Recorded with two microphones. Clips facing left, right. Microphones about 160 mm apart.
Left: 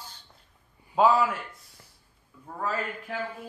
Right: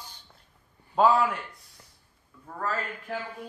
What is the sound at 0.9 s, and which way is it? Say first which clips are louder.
Speech: even; 5° left (ahead or behind).